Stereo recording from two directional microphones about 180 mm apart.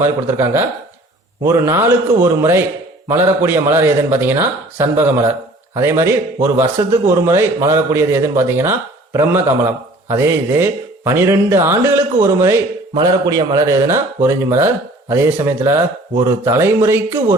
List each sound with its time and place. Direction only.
0.0 s a man's voice: 15° right (ahead or behind)